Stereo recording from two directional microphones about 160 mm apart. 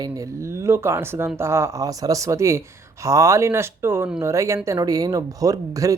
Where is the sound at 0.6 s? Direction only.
15° right (ahead or behind).